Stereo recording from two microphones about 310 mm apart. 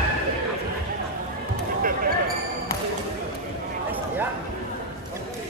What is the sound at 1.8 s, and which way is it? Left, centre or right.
Basketball bounce, right.